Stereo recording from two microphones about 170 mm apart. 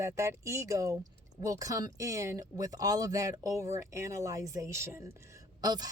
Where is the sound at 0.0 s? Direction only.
15° right (ahead or behind).